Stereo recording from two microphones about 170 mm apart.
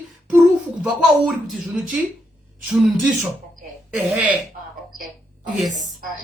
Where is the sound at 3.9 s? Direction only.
5° right (ahead or behind).